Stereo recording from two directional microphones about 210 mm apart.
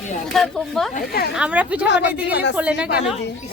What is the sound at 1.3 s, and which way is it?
Speech, 5° right (ahead or behind).